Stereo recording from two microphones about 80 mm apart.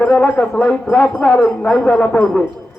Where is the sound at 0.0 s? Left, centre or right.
Centre.